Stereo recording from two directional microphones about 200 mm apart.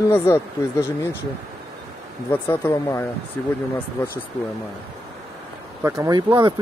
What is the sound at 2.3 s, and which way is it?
Speech, 10° left (ahead or behind).